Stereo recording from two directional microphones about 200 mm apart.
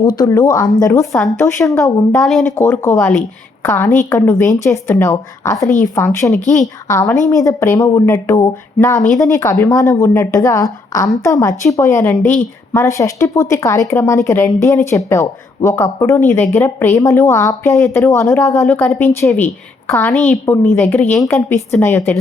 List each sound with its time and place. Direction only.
0.0 s a woman's voice: 20° left (ahead or behind)
2.1 s a woman's voice: centre (ahead or behind)
2.4 s a woman's voice: 15° left (ahead or behind)
18.6 s a woman's voice: centre (ahead or behind)